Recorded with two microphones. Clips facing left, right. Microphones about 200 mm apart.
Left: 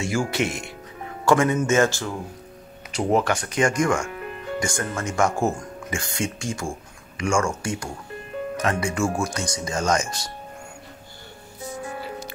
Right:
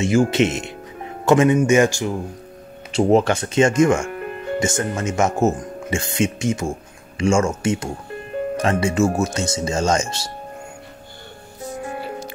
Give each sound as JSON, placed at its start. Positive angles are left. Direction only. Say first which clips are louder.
{"t": 0.3, "sound": "speech", "louder": "right 7 dB", "side_deg": -20}
{"t": 2.9, "sound": "speech", "louder": "right 6 dB", "side_deg": -25}
{"t": 4.1, "sound": "music", "louder": "right 5 dB", "side_deg": -50}
{"t": 4.6, "sound": "speech", "louder": "right 5 dB", "side_deg": -20}